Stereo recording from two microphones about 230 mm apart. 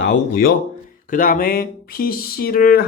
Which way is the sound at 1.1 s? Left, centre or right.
Left.